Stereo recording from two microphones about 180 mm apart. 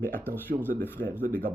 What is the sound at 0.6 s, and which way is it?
Speech, 10° left (ahead or behind).